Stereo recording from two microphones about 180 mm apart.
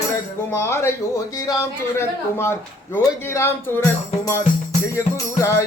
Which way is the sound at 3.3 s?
15° left (ahead or behind).